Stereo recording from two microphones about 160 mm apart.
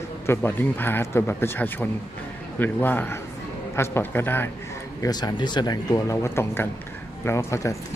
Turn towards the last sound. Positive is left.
turn(degrees=20)  # may be behind; listen again after turning